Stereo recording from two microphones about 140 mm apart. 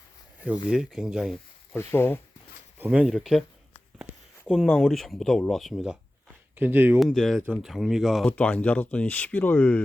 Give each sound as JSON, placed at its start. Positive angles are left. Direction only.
{"t": 0.7, "sound": "speech", "side_deg": -5}
{"t": 1.7, "sound": "speech", "side_deg": 15}
{"t": 2.7, "sound": "speech", "side_deg": -10}
{"t": 4.4, "sound": "speech", "side_deg": -5}
{"t": 6.6, "sound": "speech", "side_deg": -15}
{"t": 7.0, "sound": "speech", "side_deg": 0}